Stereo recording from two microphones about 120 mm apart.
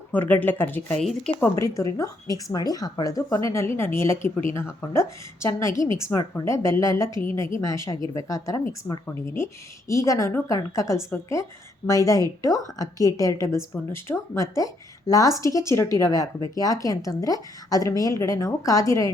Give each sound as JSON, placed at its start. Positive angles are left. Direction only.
{"t": 0.1, "sound": "a woman's voice", "side_deg": 15}